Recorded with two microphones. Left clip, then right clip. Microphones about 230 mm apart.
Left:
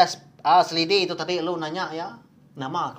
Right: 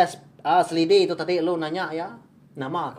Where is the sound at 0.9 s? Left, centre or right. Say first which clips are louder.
Right 5 dB; left.